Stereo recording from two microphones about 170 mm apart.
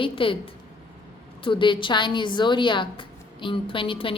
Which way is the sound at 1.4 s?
30° left (ahead or behind).